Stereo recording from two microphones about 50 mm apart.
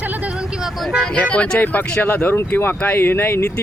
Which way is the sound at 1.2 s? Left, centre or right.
Left.